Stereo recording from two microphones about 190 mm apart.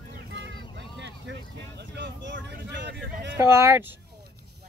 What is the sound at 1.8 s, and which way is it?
Speech, 65° right (ahead or behind).